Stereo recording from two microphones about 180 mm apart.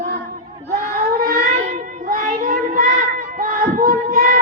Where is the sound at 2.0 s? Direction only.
50° right (ahead or behind).